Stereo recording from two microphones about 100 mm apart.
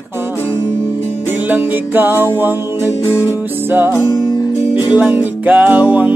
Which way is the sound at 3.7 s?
20° right (ahead or behind).